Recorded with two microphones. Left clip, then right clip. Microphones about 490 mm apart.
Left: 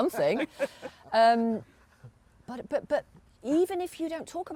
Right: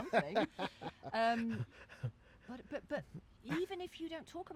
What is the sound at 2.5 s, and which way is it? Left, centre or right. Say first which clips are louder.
Speech: left 14 dB; left.